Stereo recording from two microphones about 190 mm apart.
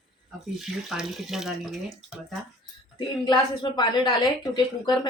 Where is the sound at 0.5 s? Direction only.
Centre (ahead or behind).